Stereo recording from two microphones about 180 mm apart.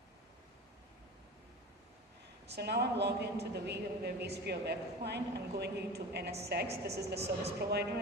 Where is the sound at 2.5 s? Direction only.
65° right (ahead or behind).